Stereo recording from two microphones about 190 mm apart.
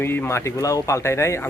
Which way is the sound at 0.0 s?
10° left (ahead or behind).